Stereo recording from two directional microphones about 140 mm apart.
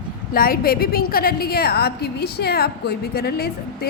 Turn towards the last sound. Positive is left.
turn(degrees=90)